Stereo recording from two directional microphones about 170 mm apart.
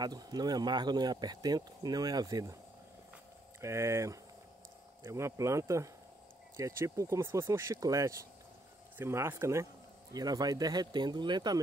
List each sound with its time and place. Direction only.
0.0 s speech: 25° right (ahead or behind)
3.6 s speech: 15° right (ahead or behind)